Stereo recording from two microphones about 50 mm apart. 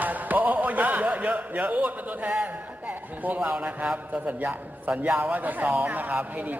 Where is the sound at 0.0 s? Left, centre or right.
Right.